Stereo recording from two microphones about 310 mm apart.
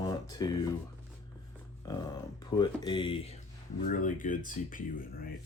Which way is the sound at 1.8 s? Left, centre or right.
Centre.